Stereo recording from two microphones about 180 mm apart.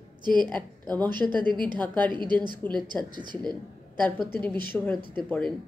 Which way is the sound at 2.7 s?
25° right (ahead or behind).